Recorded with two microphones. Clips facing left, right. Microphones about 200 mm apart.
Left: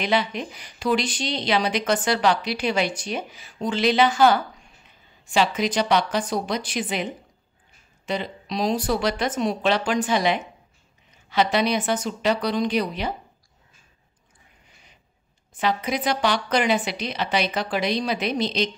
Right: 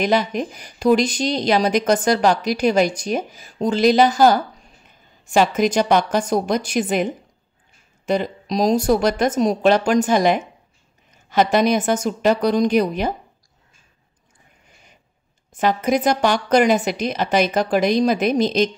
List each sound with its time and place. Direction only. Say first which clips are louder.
0.0 s speech: right 5 dB; 45° right (ahead or behind)
11.1 s a sound: right 4 dB; 45° right (ahead or behind)
11.5 s speech: right 5 dB; 45° right (ahead or behind)
15.5 s speech: right 6 dB; 45° right (ahead or behind)